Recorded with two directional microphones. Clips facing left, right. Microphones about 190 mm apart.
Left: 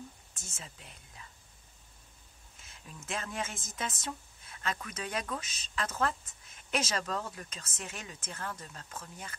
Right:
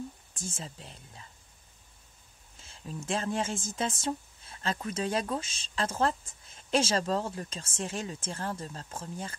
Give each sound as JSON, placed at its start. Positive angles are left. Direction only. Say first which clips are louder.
{"t": 0.3, "sound": "speech", "louder": "right 9 dB", "side_deg": -30}
{"t": 2.6, "sound": "speech", "louder": "right 10 dB", "side_deg": -30}